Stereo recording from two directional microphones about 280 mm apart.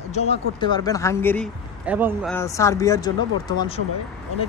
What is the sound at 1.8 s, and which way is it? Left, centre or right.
Speech, centre.